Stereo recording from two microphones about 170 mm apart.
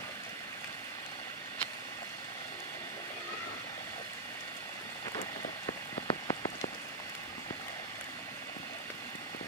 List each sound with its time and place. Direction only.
5.7 s rain on surface: 30° left (ahead or behind)